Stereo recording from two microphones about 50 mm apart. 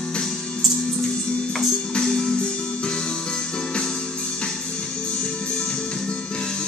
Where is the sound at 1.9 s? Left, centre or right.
Centre.